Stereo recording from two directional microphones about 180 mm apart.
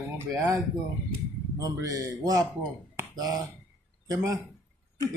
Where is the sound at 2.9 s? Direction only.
20° right (ahead or behind).